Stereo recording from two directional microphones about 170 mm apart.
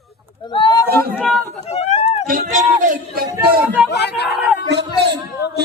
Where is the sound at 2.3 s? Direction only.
55° right (ahead or behind).